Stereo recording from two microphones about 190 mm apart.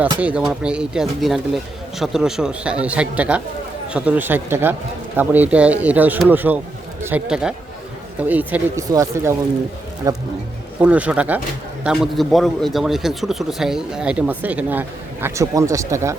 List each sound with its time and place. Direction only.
0.2 s a man's voice: 5° right (ahead or behind)
10.8 s a man's voice: 5° right (ahead or behind)